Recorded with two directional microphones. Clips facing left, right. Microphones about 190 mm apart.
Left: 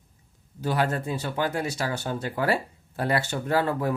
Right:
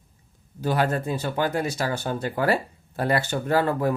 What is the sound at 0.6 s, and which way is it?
Speech, 45° right (ahead or behind).